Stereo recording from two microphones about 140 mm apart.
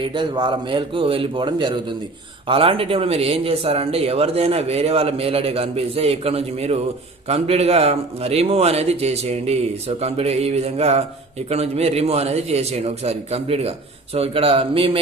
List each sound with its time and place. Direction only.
0.0 s a man's voice: 35° right (ahead or behind)